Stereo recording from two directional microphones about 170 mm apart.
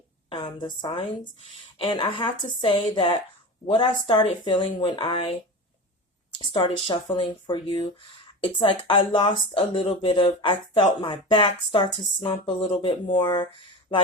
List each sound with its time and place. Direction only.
0.3 s speech: 25° left (ahead or behind)
6.4 s speech: 30° left (ahead or behind)